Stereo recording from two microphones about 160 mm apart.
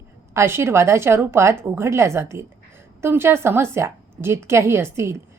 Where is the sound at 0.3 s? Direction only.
15° right (ahead or behind).